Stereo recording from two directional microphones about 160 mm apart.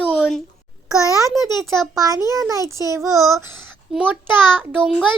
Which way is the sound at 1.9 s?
20° right (ahead or behind).